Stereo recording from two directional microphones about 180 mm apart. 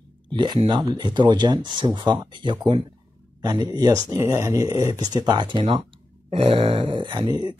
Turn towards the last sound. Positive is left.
turn(degrees=-25)  # may be behind; listen again after turning